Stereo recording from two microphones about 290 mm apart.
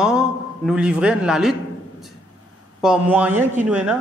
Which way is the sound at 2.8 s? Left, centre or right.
Centre.